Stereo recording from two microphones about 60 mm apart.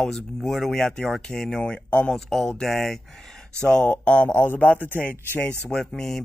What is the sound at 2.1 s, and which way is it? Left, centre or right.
Speech, centre.